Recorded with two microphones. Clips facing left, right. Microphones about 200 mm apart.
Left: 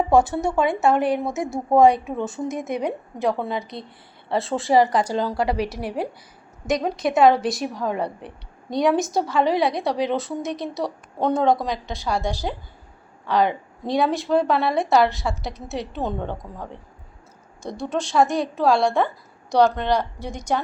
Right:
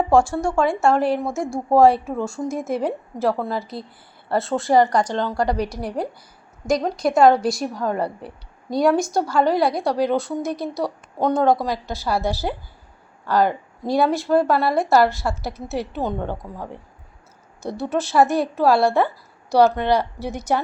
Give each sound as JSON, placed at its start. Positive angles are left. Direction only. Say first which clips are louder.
{"t": 0.9, "sound": "a woman's voice", "louder": "right 1 dB", "side_deg": 0}
{"t": 1.2, "sound": "speech", "louder": "right 1 dB", "side_deg": 20}
{"t": 2.0, "sound": "a woman's voice", "louder": "right 1 dB", "side_deg": 0}